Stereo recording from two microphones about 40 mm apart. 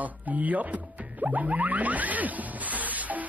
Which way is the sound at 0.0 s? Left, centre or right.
Right.